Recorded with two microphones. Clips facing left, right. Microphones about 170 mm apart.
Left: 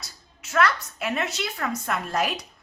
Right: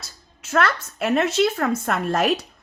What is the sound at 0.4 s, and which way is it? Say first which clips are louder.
A woman's voice: right 2 dB; 50° right (ahead or behind).